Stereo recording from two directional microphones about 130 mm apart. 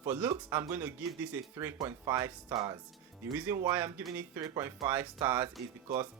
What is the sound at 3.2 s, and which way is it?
Speech, 15° right (ahead or behind).